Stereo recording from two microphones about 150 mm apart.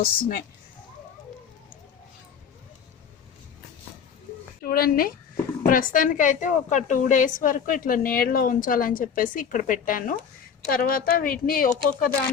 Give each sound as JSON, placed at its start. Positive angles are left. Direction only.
{"t": 0.0, "sound": "speech", "side_deg": 85}
{"t": 4.6, "sound": "speech", "side_deg": 90}
{"t": 5.6, "sound": "a woman's voice", "side_deg": 65}